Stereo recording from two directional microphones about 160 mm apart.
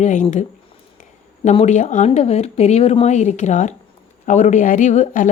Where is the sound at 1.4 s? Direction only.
45° left (ahead or behind).